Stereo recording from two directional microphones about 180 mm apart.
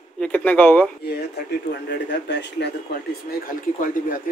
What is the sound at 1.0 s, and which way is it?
Speech, 65° left (ahead or behind).